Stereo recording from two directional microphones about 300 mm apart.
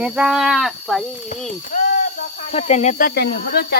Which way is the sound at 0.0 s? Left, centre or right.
Centre.